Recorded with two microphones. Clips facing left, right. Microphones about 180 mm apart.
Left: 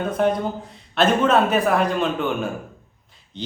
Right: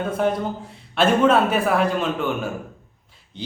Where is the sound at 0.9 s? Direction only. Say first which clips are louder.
Right 1 dB; 5° right (ahead or behind).